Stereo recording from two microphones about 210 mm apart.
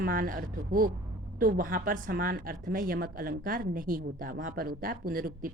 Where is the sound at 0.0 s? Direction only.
40° right (ahead or behind).